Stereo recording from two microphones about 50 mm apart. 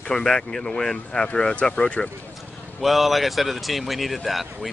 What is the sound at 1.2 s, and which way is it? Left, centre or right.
Speech, left.